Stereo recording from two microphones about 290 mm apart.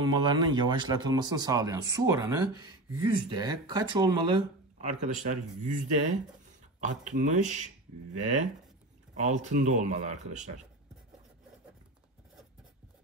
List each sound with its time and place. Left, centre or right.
0.0 s speech: centre
9.1 s speech: right